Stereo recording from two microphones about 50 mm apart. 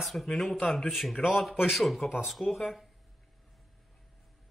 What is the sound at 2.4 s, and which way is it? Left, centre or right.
Speech, left.